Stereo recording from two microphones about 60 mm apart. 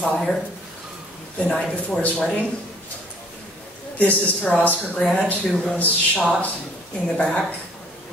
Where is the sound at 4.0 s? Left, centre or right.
Left.